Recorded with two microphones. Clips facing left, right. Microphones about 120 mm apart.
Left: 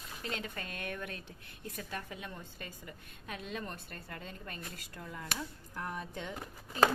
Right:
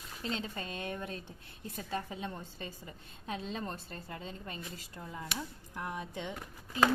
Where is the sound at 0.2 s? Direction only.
25° right (ahead or behind).